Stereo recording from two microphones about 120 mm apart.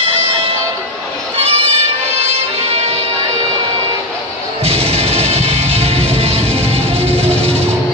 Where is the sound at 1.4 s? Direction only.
55° right (ahead or behind).